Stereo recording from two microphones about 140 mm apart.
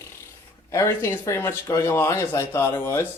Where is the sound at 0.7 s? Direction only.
20° left (ahead or behind).